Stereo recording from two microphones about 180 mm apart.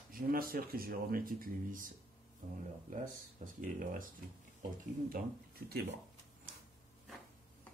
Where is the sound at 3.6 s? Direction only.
50° right (ahead or behind).